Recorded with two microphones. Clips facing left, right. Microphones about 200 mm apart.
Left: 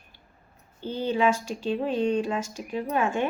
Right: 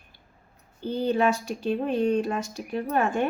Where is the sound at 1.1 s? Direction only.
60° right (ahead or behind).